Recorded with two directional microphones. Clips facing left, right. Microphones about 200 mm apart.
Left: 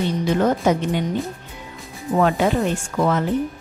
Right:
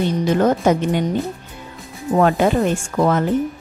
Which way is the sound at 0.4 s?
50° right (ahead or behind).